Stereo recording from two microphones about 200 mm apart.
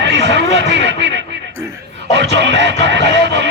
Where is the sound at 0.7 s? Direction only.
60° right (ahead or behind).